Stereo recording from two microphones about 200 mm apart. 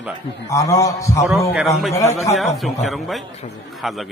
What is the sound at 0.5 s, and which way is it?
A man's voice, 15° left (ahead or behind).